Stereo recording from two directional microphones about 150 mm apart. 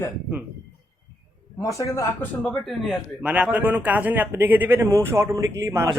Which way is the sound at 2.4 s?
5° left (ahead or behind).